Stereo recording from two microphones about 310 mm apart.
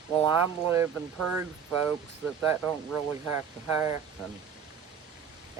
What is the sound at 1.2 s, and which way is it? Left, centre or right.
Speech, right.